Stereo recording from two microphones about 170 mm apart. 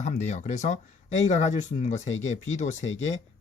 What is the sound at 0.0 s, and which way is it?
Speech, 45° left (ahead or behind).